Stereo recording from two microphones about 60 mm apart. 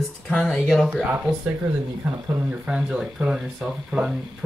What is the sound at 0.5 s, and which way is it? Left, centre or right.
Speech, centre.